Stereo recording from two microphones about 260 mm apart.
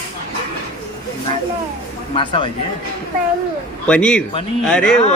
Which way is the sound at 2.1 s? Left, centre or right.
Centre.